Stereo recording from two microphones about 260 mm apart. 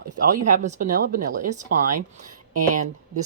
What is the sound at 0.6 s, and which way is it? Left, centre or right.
Speech, right.